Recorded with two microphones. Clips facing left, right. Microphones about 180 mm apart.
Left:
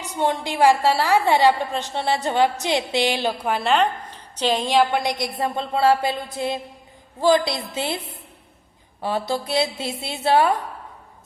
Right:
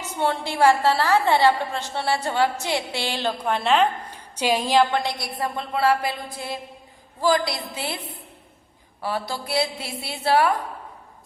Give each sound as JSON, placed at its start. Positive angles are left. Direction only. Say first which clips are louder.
{"t": 0.0, "sound": "a woman's voice", "louder": "left 2 dB", "side_deg": 15}
{"t": 4.0, "sound": "a sound", "louder": "left 1 dB", "side_deg": -10}
{"t": 4.9, "sound": "a woman's voice", "louder": "left 3 dB", "side_deg": 15}